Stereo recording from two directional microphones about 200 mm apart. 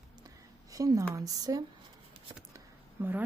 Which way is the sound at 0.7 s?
15° right (ahead or behind).